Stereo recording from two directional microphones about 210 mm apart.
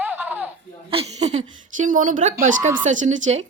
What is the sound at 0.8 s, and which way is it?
A woman's voice, 30° right (ahead or behind).